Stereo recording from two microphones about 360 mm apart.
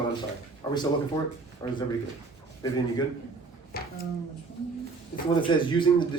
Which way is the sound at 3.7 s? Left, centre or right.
Left.